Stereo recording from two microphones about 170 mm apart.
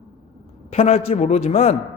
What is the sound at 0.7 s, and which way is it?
A man's voice, 35° left (ahead or behind).